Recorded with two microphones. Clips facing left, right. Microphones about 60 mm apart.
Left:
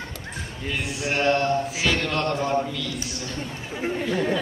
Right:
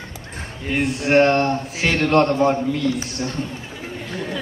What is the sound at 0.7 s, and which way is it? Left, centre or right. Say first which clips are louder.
Speech: right 11 dB; right.